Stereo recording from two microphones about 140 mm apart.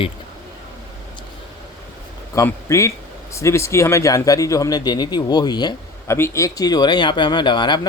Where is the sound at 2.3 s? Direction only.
20° left (ahead or behind).